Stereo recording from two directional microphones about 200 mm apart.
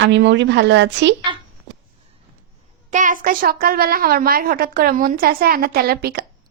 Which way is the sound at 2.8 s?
40° right (ahead or behind).